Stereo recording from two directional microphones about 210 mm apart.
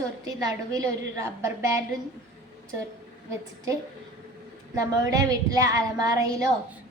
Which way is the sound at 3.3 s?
15° right (ahead or behind).